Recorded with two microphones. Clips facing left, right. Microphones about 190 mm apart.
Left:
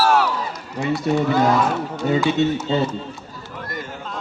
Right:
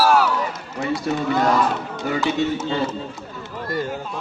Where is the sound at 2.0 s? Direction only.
25° left (ahead or behind).